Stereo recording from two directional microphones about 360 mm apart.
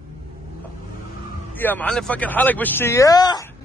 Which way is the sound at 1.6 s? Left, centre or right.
Centre.